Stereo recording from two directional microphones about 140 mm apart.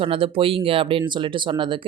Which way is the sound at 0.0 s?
40° right (ahead or behind).